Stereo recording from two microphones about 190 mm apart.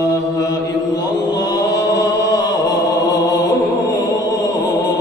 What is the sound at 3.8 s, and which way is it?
Music, 20° left (ahead or behind).